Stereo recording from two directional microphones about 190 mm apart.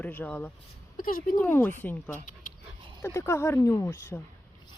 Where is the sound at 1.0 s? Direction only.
50° left (ahead or behind).